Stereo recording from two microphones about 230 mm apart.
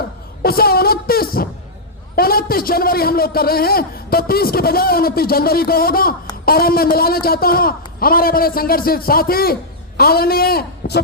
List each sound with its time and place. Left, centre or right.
0.4 s a man's voice: left